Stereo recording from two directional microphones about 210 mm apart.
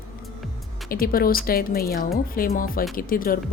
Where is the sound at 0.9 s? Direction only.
45° left (ahead or behind).